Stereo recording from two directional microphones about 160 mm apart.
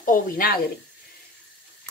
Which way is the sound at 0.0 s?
60° left (ahead or behind).